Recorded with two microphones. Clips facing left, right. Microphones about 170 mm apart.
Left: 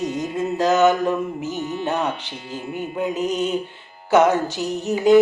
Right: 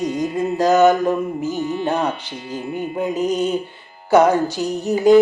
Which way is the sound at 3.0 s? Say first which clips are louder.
Right 2 dB; centre (ahead or behind).